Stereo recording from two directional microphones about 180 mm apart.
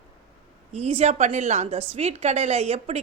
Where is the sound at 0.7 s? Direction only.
35° right (ahead or behind).